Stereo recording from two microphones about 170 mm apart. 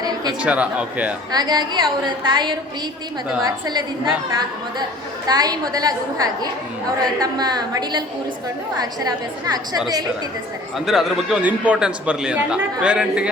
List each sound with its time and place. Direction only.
0.4 s speech: 5° right (ahead or behind)
1.3 s a woman's voice: 25° right (ahead or behind)
5.3 s a woman's voice: 20° right (ahead or behind)
10.8 s a man's voice: centre (ahead or behind)